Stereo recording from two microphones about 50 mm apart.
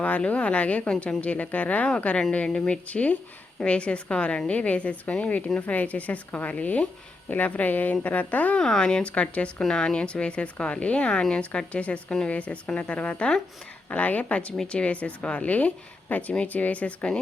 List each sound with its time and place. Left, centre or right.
0.3 s speech: left
8.5 s speech: centre; by 17.1 s left